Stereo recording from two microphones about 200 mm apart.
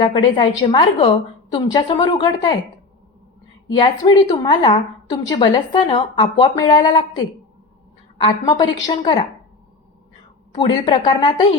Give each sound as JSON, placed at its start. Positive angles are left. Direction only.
{"t": 0.0, "sound": "a woman's voice", "side_deg": 25}
{"t": 4.0, "sound": "a woman's voice", "side_deg": 30}
{"t": 8.2, "sound": "a woman's voice", "side_deg": 25}
{"t": 10.5, "sound": "a woman's voice", "side_deg": 25}